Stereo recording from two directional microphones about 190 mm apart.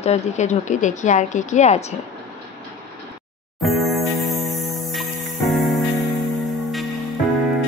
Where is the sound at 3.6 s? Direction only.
Centre (ahead or behind).